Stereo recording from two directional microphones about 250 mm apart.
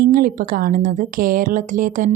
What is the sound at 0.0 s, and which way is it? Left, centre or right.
A woman's voice, right.